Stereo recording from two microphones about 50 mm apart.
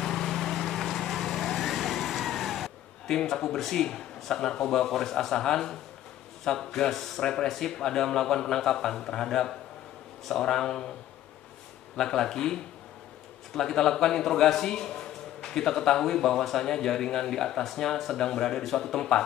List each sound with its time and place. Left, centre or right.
0.0 s vehicle: centre
3.2 s a man's voice: centre
12.0 s a man's voice: centre
13.6 s a man's voice: centre